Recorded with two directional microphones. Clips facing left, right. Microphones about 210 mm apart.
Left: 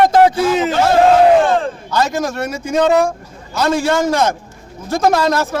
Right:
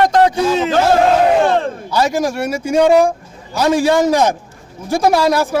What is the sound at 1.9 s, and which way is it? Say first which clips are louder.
A man's voice: right 2 dB; 10° right (ahead or behind).